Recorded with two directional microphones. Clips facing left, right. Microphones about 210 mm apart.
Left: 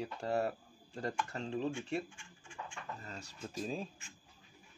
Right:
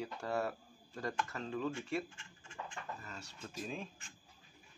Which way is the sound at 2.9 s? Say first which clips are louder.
Left 2 dB; 35° left (ahead or behind).